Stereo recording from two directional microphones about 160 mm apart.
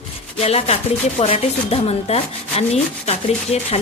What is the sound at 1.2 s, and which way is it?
A woman's voice, 40° left (ahead or behind).